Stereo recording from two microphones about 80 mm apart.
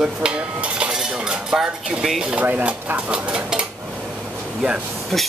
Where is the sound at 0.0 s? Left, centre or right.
Centre.